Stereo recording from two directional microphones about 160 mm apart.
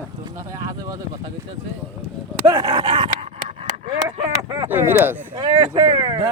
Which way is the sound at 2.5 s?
25° right (ahead or behind).